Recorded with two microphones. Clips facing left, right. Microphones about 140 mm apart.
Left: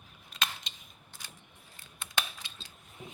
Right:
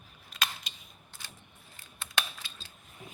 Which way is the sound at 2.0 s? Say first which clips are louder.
Right 1 dB; 20° left (ahead or behind).